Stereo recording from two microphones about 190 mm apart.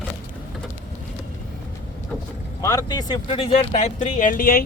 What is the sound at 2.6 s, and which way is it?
Speech, 15° left (ahead or behind).